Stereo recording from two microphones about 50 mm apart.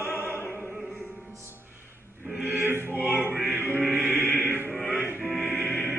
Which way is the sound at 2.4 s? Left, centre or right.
Right.